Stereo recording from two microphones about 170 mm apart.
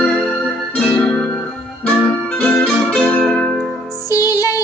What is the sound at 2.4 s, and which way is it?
Music, 5° left (ahead or behind).